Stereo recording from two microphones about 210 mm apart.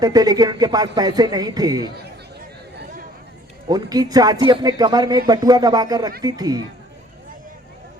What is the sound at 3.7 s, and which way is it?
A man's voice, 20° right (ahead or behind).